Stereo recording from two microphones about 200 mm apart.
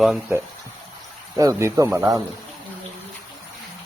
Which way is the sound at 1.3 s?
15° right (ahead or behind).